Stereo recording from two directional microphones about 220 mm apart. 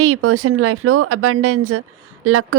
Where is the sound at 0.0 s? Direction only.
70° right (ahead or behind).